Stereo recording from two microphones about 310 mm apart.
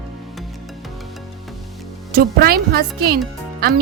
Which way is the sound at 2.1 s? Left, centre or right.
Right.